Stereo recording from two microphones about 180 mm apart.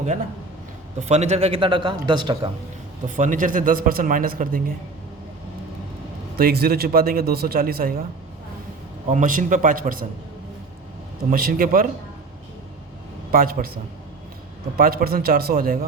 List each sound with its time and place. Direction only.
0.9 s a man's voice: 40° right (ahead or behind)
3.2 s speech: 45° right (ahead or behind)
6.3 s a man's voice: 60° right (ahead or behind)
9.0 s speech: 45° right (ahead or behind)
11.3 s speech: 55° right (ahead or behind)
13.3 s speech: 55° right (ahead or behind)
14.8 s a man's voice: 55° right (ahead or behind)